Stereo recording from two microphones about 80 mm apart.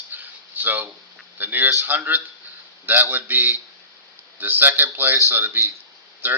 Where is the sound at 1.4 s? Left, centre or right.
Right.